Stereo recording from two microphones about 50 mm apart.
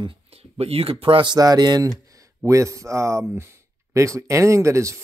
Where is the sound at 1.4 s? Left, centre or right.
Right.